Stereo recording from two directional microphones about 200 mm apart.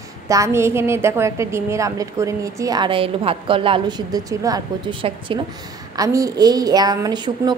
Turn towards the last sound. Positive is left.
turn(degrees=-20)  # may be behind; listen again after turning